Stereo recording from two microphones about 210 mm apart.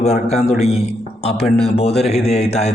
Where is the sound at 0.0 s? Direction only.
30° left (ahead or behind).